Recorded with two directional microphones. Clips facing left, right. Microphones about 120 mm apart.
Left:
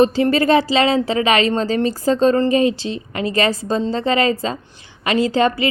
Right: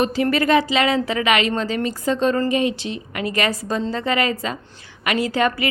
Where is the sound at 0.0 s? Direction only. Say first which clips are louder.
Left 5 dB; 25° left (ahead or behind).